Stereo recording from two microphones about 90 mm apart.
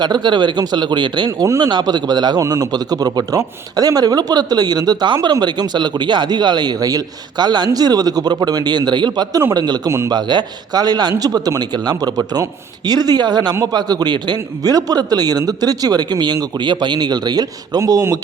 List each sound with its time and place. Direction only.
0.0 s speech: 55° right (ahead or behind)
2.4 s speech: 40° right (ahead or behind)